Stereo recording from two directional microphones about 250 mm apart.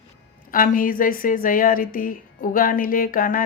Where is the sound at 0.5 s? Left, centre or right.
Left.